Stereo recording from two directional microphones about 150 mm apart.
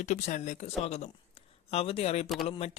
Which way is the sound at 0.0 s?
50° left (ahead or behind).